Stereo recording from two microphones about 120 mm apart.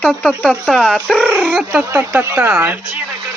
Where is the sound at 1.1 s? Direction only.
10° right (ahead or behind).